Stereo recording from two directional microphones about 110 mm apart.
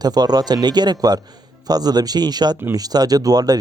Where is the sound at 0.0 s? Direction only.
35° right (ahead or behind).